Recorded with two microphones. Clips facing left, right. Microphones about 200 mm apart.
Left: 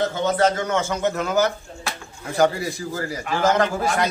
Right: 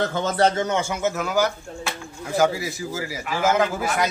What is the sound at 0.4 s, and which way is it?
Speech, 30° right (ahead or behind).